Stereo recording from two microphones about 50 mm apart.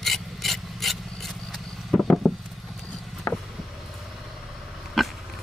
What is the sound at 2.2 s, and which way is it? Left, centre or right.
Vehicle, centre.